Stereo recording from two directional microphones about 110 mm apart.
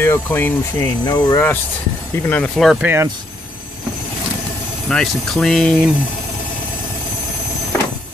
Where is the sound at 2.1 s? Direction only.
20° left (ahead or behind).